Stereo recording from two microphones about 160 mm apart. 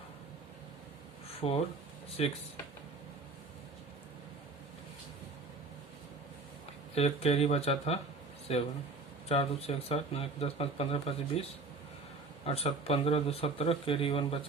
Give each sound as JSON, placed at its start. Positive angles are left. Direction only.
{"t": 1.4, "sound": "speech", "side_deg": 35}
{"t": 6.9, "sound": "speech", "side_deg": 40}
{"t": 12.5, "sound": "speech", "side_deg": 40}